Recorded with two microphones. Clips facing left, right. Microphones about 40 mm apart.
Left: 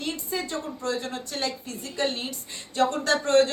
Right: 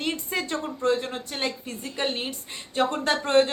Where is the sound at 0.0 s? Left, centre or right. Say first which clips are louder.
Right 2 dB; right.